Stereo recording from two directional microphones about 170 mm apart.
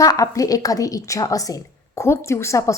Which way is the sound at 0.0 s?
20° left (ahead or behind).